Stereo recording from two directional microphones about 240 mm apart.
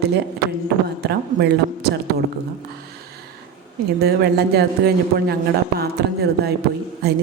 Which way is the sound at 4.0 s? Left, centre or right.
Right.